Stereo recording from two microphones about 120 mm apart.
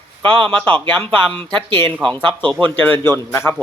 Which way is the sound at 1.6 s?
45° right (ahead or behind).